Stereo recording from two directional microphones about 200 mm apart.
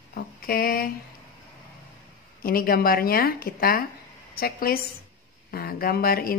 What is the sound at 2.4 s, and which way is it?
Speech, 45° left (ahead or behind).